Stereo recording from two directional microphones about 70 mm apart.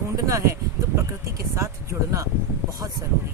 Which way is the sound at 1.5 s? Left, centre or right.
Right.